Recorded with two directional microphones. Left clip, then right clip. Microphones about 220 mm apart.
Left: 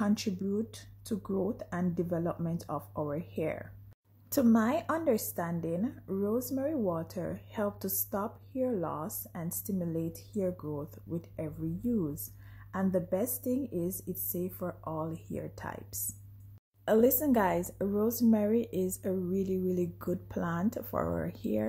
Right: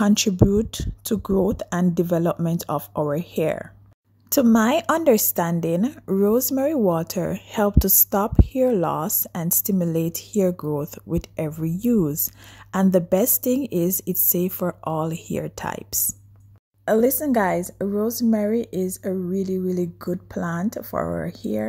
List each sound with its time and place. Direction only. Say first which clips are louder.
0.0 s a woman's voice: right 14 dB; 40° right (ahead or behind)
16.8 s speech: right 7 dB; 25° right (ahead or behind)